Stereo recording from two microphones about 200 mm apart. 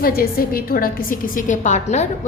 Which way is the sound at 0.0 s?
50° left (ahead or behind).